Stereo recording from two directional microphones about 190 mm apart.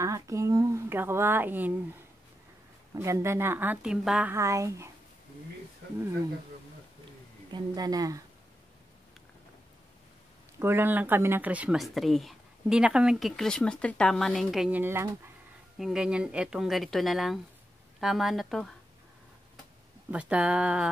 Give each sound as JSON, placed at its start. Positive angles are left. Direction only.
{"t": 0.0, "sound": "a woman's voice", "side_deg": -15}
{"t": 3.0, "sound": "speech", "side_deg": -15}
{"t": 7.5, "sound": "speech", "side_deg": -20}
{"t": 10.6, "sound": "speech", "side_deg": -10}
{"t": 20.1, "sound": "speech", "side_deg": -5}